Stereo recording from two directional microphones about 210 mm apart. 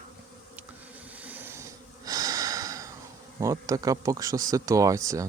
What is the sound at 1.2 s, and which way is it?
Snort, 10° right (ahead or behind).